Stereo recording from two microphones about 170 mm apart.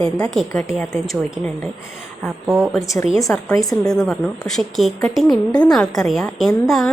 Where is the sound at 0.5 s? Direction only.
15° left (ahead or behind).